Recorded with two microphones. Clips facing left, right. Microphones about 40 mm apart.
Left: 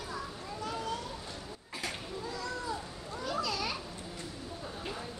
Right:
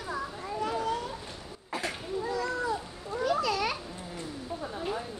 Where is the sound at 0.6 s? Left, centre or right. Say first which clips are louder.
Right 6 dB; right.